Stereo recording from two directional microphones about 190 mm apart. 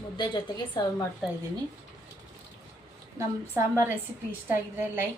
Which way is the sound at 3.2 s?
15° right (ahead or behind).